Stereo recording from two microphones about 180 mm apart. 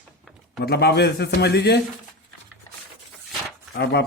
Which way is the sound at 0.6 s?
65° left (ahead or behind).